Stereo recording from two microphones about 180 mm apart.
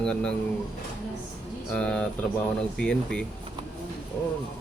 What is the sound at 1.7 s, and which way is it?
Speech, 5° left (ahead or behind).